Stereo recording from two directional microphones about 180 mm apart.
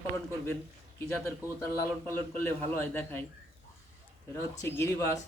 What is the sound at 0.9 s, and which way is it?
A man's voice, 15° left (ahead or behind).